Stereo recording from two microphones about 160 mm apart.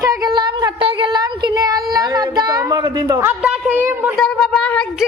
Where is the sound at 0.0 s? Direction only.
25° right (ahead or behind).